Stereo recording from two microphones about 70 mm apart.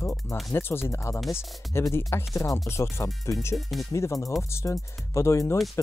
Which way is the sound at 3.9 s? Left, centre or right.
Left.